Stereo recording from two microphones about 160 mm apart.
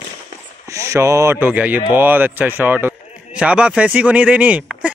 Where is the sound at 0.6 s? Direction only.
20° right (ahead or behind).